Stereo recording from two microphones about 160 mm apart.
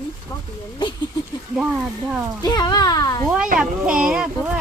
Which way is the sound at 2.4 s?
25° left (ahead or behind).